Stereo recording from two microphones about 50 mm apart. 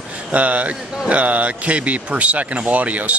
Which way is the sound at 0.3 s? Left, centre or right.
Right.